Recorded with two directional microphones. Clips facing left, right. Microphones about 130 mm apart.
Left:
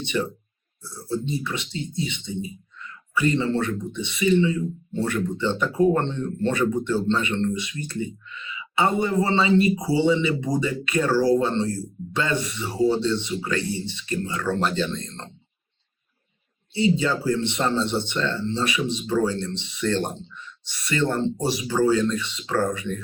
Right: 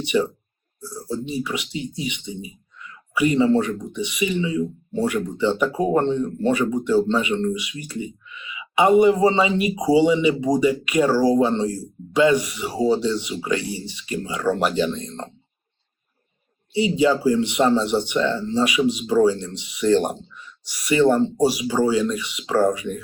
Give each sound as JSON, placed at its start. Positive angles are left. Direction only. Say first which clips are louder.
{"t": 0.0, "sound": "speech", "louder": "right 5 dB", "side_deg": -10}
{"t": 16.7, "sound": "speech", "louder": "right 3 dB", "side_deg": -15}